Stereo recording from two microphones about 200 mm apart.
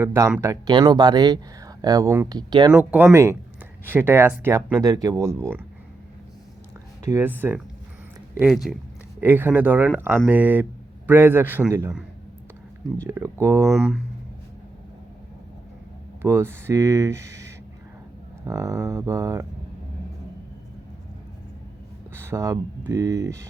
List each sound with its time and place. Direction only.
0.0 s speech: 15° right (ahead or behind)
2.7 s a man's voice: 10° right (ahead or behind)
7.1 s a man's voice: 10° right (ahead or behind)
8.7 s a man's voice: centre (ahead or behind)
13.7 s speech: centre (ahead or behind)
16.2 s a man's voice: 10° right (ahead or behind)
22.1 s a sound: 10° right (ahead or behind)
22.9 s a man's voice: 15° right (ahead or behind)